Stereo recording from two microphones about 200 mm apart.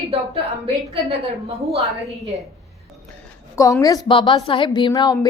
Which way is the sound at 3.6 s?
15° left (ahead or behind).